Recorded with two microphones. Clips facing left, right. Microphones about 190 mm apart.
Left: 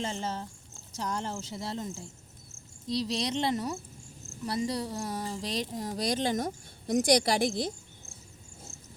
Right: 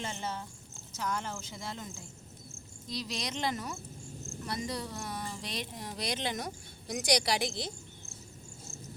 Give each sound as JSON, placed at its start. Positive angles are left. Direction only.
{"t": 0.2, "sound": "speech", "side_deg": 40}